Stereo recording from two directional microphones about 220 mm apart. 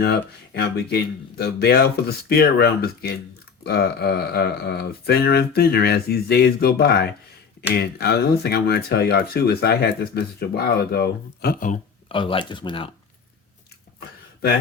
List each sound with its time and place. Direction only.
0.0 s speech: 50° left (ahead or behind)
12.0 s speech: 25° left (ahead or behind)